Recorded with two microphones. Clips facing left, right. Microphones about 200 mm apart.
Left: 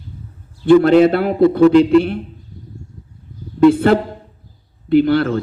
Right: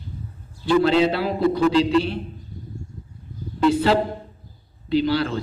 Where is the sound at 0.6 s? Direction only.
55° left (ahead or behind).